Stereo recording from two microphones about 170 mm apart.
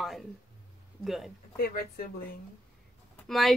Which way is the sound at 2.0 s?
60° left (ahead or behind).